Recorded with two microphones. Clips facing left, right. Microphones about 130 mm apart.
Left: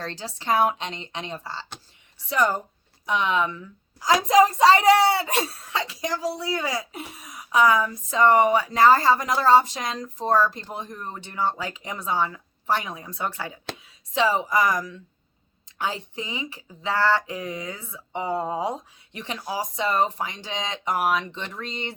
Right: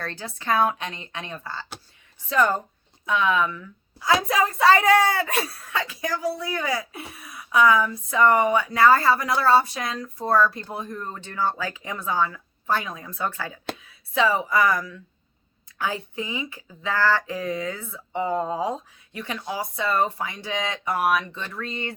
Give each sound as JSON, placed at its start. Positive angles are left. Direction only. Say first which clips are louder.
{"t": 0.0, "sound": "speech", "louder": "even", "side_deg": 20}
{"t": 3.1, "sound": "speech", "louder": "right 1 dB", "side_deg": 20}
{"t": 19.4, "sound": "speech", "louder": "left 1 dB", "side_deg": 30}
{"t": 19.7, "sound": "speech", "louder": "even", "side_deg": 20}